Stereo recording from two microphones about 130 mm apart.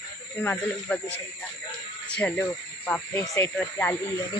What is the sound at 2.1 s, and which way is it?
Speech, 10° left (ahead or behind).